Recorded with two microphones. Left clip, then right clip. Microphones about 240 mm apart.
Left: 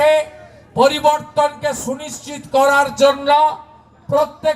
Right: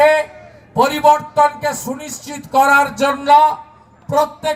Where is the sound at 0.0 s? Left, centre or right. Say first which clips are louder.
Right 1 dB; right.